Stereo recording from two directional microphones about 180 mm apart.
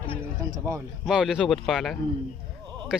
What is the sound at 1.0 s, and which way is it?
Speech, centre (ahead or behind).